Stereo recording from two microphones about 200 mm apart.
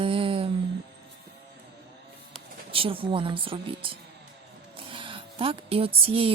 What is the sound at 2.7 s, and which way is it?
A woman's voice, 25° right (ahead or behind).